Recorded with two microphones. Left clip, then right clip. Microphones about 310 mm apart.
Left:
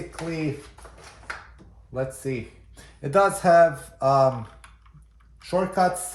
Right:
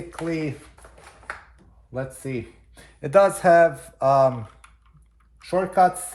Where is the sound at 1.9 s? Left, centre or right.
Centre.